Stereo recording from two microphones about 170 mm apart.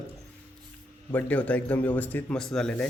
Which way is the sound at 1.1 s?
10° left (ahead or behind).